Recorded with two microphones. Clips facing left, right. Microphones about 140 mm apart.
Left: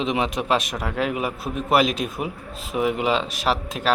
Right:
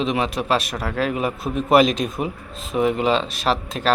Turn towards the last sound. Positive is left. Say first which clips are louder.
# right 2 dB
turn(degrees=10)  # may be behind; listen again after turning